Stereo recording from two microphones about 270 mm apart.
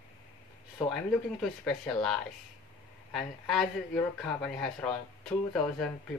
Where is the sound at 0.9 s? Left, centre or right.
Centre.